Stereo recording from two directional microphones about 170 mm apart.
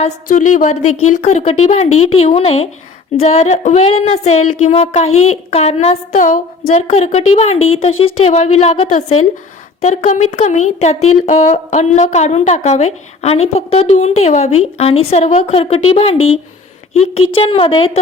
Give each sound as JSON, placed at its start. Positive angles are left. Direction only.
{"t": 0.3, "sound": "speech", "side_deg": 50}
{"t": 6.1, "sound": "a woman's voice", "side_deg": 50}
{"t": 6.8, "sound": "speech", "side_deg": 40}